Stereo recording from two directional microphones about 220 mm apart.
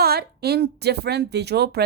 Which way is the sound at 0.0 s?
45° right (ahead or behind).